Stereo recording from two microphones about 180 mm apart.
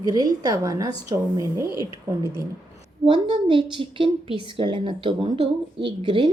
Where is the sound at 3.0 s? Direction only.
25° right (ahead or behind).